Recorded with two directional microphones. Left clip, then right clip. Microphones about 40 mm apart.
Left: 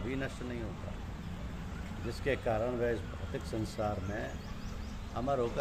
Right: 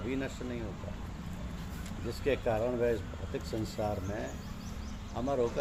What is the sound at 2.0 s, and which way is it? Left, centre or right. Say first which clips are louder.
Speech: right 2 dB; centre.